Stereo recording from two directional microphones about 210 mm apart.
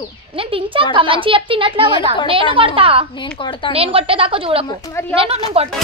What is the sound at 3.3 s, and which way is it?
Speech, 25° left (ahead or behind).